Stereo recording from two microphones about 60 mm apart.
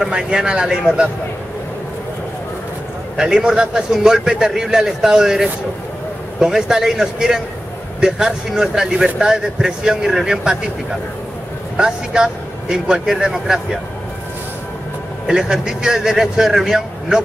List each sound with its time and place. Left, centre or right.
0.1 s speech: centre
3.2 s speech: centre
11.7 s speech: centre
15.2 s speech: centre